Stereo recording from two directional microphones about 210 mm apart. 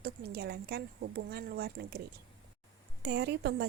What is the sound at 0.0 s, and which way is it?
A woman's voice, 50° right (ahead or behind).